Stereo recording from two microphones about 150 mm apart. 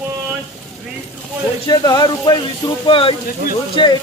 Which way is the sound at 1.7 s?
25° left (ahead or behind).